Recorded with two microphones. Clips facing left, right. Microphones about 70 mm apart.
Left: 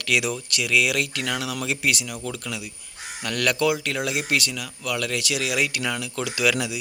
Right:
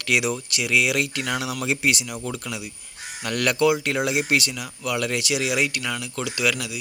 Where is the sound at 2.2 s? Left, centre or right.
Centre.